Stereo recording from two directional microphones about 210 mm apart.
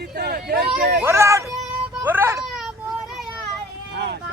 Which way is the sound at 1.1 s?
15° right (ahead or behind).